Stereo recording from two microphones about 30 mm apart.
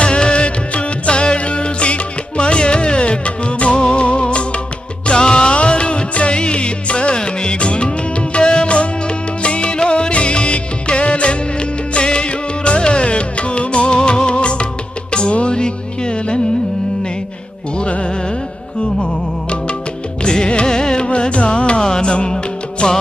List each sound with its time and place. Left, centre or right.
0.0 s music: left
5.0 s music: left
17.8 s music: left
20.2 s music: left
21.8 s music: left
22.0 s music: left